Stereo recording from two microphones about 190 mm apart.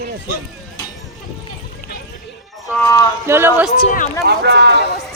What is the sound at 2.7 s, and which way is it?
Speech, 15° left (ahead or behind).